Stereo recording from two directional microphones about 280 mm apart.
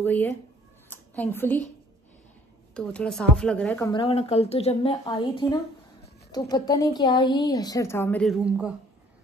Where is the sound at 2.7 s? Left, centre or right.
Centre.